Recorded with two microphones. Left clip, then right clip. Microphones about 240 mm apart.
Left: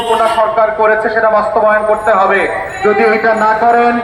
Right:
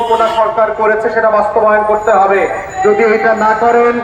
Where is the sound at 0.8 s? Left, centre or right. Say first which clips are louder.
Left 1 dB; left.